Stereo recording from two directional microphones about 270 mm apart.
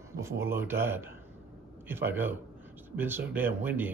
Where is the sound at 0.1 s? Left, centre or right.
Centre.